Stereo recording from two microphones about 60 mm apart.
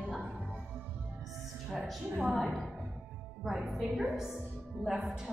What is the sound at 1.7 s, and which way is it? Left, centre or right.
Speech, centre.